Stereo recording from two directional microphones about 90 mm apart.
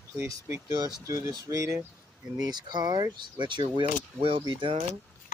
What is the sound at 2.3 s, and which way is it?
Speech, 50° right (ahead or behind).